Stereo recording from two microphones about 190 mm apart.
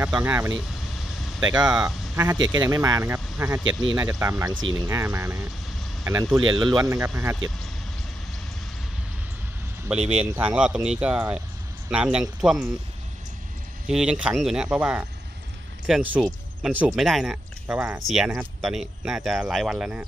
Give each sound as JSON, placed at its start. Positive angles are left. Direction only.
{"t": 0.0, "sound": "speech", "side_deg": -10}
{"t": 9.8, "sound": "speech", "side_deg": -5}
{"t": 13.8, "sound": "speech", "side_deg": -5}